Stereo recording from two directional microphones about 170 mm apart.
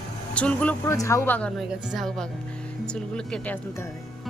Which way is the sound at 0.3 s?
10° left (ahead or behind).